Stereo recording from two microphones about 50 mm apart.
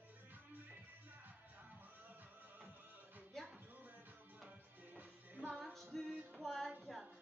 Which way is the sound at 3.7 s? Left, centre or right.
Right.